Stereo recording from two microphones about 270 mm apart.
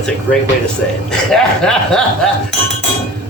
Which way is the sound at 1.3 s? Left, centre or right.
Centre.